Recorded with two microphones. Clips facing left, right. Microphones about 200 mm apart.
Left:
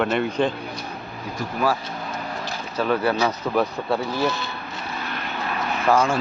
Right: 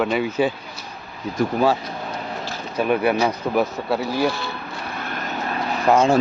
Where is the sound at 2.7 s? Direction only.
15° right (ahead or behind).